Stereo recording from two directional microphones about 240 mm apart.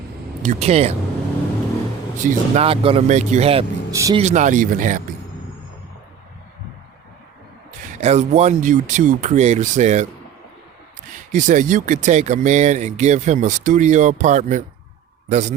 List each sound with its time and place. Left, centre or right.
0.4 s speech: right
2.1 s speech: right
3.9 s speech: centre
4.2 s speech: right
7.7 s speech: right
11.3 s speech: right